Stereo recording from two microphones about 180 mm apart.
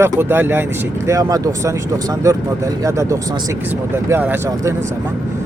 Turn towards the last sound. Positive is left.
turn(degrees=-15)  # may be behind; listen again after turning